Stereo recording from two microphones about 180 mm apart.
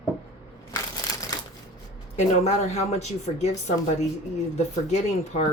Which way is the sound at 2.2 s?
40° left (ahead or behind).